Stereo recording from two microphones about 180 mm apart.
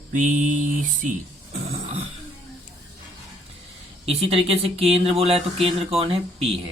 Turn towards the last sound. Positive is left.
turn(degrees=-35)  # may be behind; listen again after turning